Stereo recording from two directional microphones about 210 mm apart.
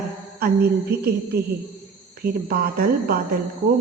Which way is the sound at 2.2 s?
45° right (ahead or behind).